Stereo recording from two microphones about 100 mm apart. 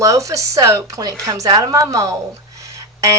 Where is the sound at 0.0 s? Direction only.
35° right (ahead or behind).